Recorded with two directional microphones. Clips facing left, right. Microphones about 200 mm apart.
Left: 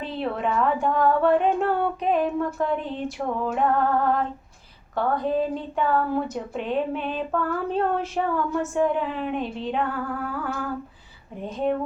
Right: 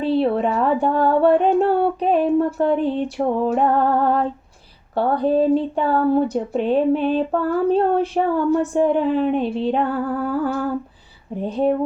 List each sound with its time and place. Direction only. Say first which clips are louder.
0.0 s a sound: right 9 dB; 35° right (ahead or behind)
4.9 s speech: right 6 dB; 35° right (ahead or behind)
11.3 s speech: right 7 dB; 35° right (ahead or behind)